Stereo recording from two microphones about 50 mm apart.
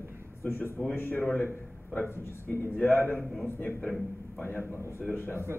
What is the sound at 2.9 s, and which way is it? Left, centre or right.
Speech, left.